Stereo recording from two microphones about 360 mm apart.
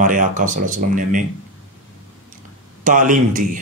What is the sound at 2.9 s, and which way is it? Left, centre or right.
Speech, right.